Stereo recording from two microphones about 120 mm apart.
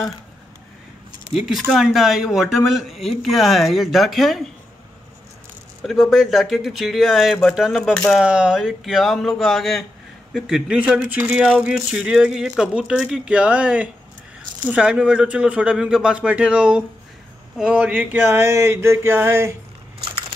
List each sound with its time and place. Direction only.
1.3 s speech: centre (ahead or behind)
5.9 s speech: centre (ahead or behind)
8.2 s speech: 5° right (ahead or behind)
17.6 s a sound: 10° right (ahead or behind)